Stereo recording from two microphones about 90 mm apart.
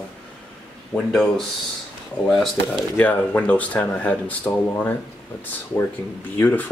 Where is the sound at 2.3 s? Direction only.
5° left (ahead or behind).